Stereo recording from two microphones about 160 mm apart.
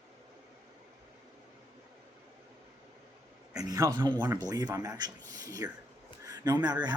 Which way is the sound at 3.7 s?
20° right (ahead or behind).